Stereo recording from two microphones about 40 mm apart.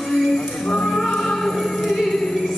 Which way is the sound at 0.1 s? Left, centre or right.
Centre.